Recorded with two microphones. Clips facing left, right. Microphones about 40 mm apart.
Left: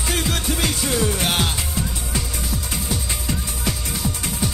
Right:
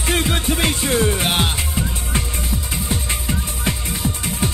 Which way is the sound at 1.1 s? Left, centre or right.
Centre.